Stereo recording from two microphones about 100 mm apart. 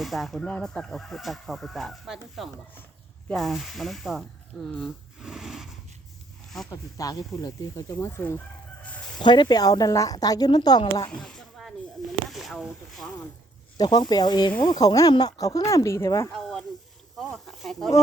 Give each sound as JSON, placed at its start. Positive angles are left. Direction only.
{"t": 0.0, "sound": "speech", "side_deg": 0}
{"t": 5.2, "sound": "a sound", "side_deg": -5}
{"t": 6.7, "sound": "a woman's voice", "side_deg": 35}
{"t": 7.9, "sound": "speech", "side_deg": 20}
{"t": 8.8, "sound": "chicken", "side_deg": 15}
{"t": 9.2, "sound": "a woman's voice", "side_deg": 50}
{"t": 11.1, "sound": "a sound", "side_deg": 5}
{"t": 12.3, "sound": "speech", "side_deg": 0}
{"t": 13.7, "sound": "a woman's voice", "side_deg": 45}
{"t": 16.3, "sound": "speech", "side_deg": 5}